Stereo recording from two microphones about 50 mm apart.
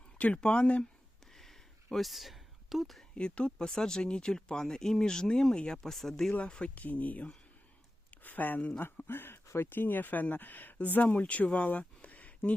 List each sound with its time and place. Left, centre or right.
0.2 s speech: left
1.3 s a sound: centre
3.2 s speech: centre
6.4 s speech: left
9.0 s speech: left